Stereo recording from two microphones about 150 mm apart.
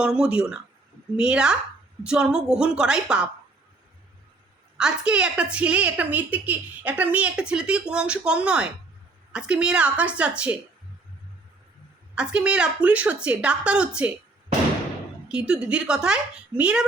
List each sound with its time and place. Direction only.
0.0 s a woman's voice: 5° right (ahead or behind)
4.8 s a woman's voice: 5° right (ahead or behind)
12.1 s a woman's voice: 5° right (ahead or behind)
15.3 s a woman's voice: 5° right (ahead or behind)